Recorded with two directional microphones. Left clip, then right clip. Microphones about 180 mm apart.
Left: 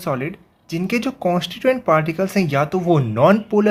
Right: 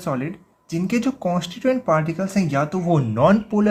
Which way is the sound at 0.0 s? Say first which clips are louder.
Left 3 dB; 30° left (ahead or behind).